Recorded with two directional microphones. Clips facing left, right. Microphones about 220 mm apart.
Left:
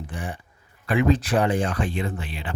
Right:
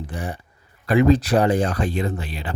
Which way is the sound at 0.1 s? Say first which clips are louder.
Right 3 dB; 40° right (ahead or behind).